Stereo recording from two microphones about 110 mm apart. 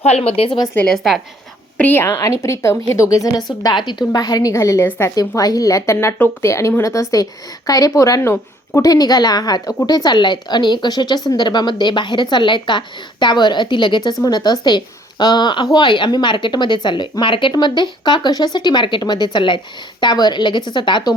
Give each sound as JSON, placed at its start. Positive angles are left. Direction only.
{"t": 0.0, "sound": "speech", "side_deg": 75}
{"t": 0.9, "sound": "a woman's voice", "side_deg": 0}
{"t": 1.8, "sound": "a woman's voice", "side_deg": 20}